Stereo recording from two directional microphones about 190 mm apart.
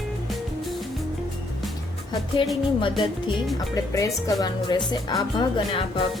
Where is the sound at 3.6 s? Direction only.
15° left (ahead or behind).